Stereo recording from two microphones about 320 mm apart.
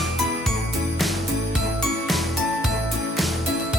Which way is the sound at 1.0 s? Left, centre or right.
Centre.